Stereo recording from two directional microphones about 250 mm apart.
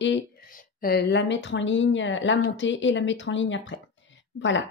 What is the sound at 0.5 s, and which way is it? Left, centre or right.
A woman's voice, left.